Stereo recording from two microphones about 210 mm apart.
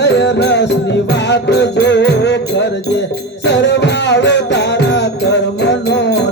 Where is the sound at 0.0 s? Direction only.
55° left (ahead or behind).